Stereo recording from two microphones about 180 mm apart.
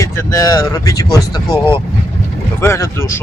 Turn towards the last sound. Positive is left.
turn(degrees=15)  # may be behind; listen again after turning